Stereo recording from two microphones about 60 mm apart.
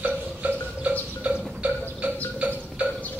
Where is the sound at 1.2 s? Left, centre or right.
Right.